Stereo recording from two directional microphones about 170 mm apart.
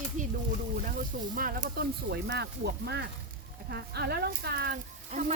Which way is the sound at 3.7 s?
75° right (ahead or behind).